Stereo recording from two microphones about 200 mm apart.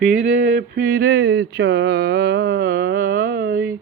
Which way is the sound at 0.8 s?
45° right (ahead or behind).